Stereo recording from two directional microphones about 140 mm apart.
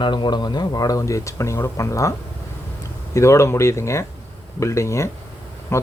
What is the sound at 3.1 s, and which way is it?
Speech, 20° left (ahead or behind).